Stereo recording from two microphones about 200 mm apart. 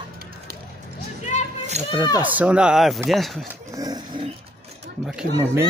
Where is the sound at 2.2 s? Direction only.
5° right (ahead or behind).